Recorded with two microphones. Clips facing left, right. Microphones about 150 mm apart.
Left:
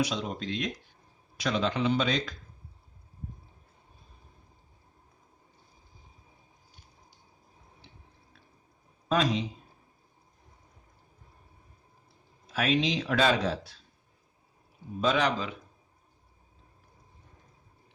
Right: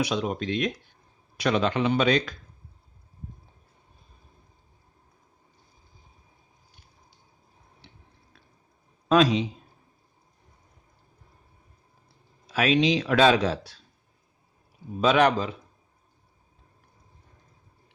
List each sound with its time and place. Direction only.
0.0 s a man's voice: 65° right (ahead or behind)
9.0 s a man's voice: 90° right
12.5 s speech: 90° right
15.0 s a man's voice: 70° right (ahead or behind)